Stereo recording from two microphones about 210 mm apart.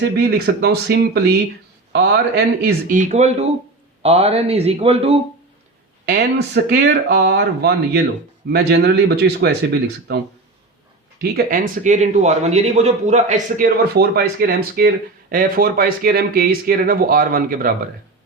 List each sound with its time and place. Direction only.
0.0 s a man's voice: 50° right (ahead or behind); by 5.2 s 30° right (ahead or behind)
6.1 s a man's voice: 50° right (ahead or behind)
11.2 s a man's voice: 45° right (ahead or behind)